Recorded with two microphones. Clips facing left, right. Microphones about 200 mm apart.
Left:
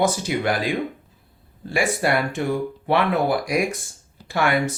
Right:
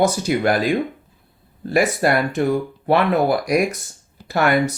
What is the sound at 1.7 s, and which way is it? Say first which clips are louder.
Speech: right 4 dB; 40° right (ahead or behind).